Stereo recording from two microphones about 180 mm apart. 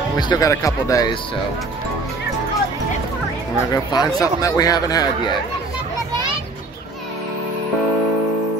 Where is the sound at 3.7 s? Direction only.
20° left (ahead or behind).